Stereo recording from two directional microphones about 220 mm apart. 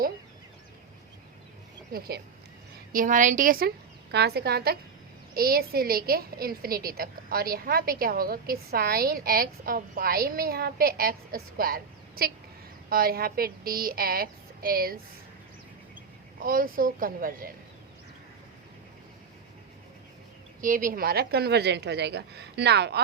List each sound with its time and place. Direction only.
1.9 s a woman's voice: 45° right (ahead or behind)
16.4 s a woman's voice: 40° right (ahead or behind)
20.6 s a woman's voice: 40° right (ahead or behind)